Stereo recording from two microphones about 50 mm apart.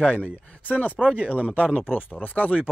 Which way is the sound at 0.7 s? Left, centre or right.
Left.